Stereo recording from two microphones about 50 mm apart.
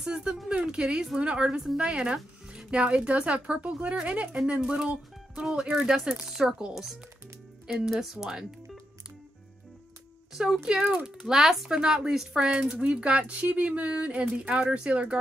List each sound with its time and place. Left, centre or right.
0.0 s speech: centre
10.3 s speech: centre
11.1 s speech: centre
11.7 s speech: centre